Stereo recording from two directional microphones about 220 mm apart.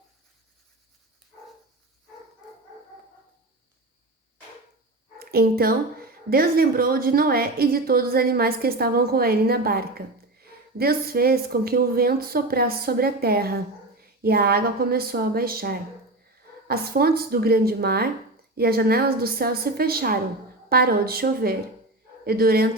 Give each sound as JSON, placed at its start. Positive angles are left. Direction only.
{"t": 5.2, "sound": "a woman's voice", "side_deg": -45}